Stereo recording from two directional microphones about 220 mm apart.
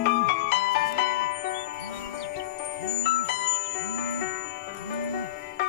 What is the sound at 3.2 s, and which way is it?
Music, 45° left (ahead or behind).